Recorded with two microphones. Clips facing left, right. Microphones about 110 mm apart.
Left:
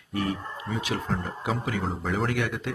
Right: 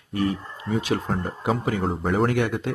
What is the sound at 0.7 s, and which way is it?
Speech, 40° right (ahead or behind).